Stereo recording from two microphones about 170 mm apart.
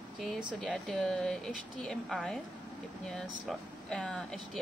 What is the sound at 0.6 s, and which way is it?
A woman's voice, centre (ahead or behind).